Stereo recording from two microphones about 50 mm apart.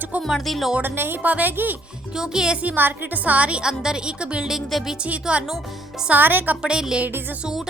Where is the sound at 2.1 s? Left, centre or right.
Centre.